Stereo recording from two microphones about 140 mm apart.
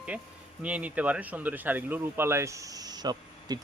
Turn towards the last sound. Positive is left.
turn(degrees=-30)  # may be behind; listen again after turning